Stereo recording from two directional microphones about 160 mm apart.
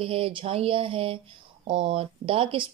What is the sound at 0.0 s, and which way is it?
Speech, 35° right (ahead or behind).